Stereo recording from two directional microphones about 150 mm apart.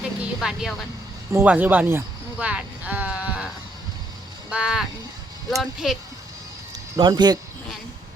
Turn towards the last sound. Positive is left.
turn(degrees=-30)  # may be behind; listen again after turning